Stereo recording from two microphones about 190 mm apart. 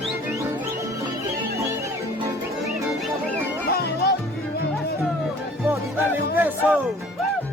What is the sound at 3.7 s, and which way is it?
Music, 55° left (ahead or behind).